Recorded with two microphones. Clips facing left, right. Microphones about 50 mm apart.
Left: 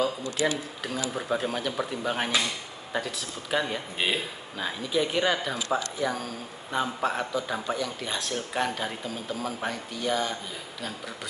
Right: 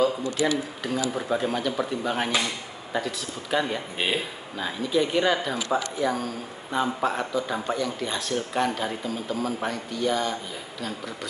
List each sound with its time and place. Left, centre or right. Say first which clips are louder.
0.4 s speech: right 2 dB; centre